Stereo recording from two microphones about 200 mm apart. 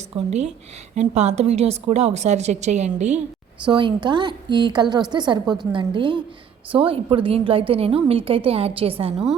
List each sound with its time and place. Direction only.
0.3 s a woman's voice: 30° right (ahead or behind)
3.7 s a woman's voice: 25° right (ahead or behind)